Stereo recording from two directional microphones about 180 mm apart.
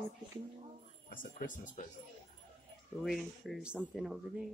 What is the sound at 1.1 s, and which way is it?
Speech, 45° left (ahead or behind).